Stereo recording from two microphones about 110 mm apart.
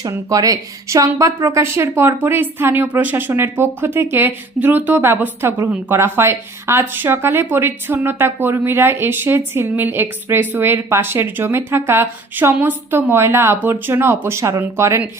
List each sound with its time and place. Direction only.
0.1 s a woman's voice: 30° right (ahead or behind)